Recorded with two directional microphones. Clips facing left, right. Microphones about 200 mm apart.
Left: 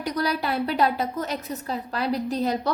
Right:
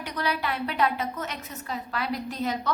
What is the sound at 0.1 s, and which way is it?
A woman's voice, 35° left (ahead or behind).